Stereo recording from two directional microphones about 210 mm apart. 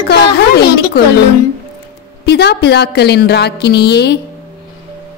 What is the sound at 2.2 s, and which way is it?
A woman's voice, 50° left (ahead or behind).